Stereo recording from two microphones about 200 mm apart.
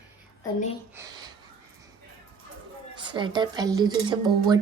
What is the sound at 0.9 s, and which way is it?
Speech, 15° right (ahead or behind).